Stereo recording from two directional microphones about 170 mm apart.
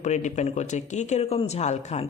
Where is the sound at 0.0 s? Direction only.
45° left (ahead or behind).